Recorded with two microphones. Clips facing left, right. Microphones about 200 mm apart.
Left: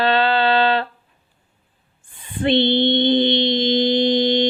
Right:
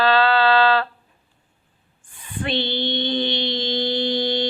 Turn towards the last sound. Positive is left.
turn(degrees=20)  # may be behind; listen again after turning